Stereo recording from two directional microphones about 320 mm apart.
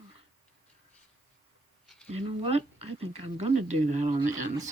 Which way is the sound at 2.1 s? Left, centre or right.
Centre.